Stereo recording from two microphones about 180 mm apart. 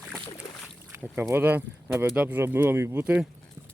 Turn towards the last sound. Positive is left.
turn(degrees=-10)  # may be behind; listen again after turning